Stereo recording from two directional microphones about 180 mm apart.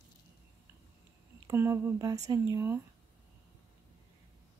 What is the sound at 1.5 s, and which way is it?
Speech, 15° right (ahead or behind).